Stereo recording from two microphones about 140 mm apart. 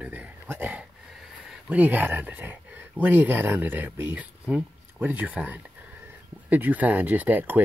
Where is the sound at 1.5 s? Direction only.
10° right (ahead or behind).